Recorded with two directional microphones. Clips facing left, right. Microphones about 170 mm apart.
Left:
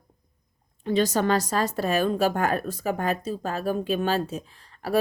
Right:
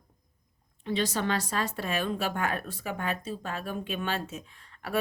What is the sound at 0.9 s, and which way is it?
Speech, 45° left (ahead or behind).